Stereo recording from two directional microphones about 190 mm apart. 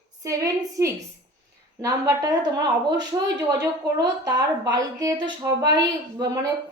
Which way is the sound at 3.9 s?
20° right (ahead or behind).